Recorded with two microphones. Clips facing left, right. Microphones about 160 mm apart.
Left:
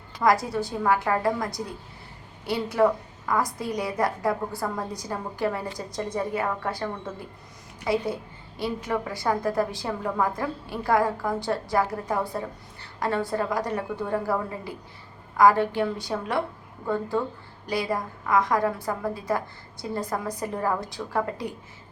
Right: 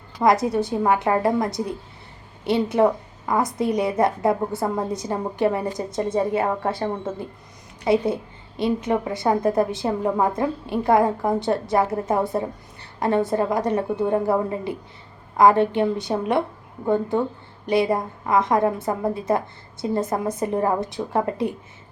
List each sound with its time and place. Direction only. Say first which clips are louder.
0.2 s a woman's voice: right 4 dB; 20° right (ahead or behind)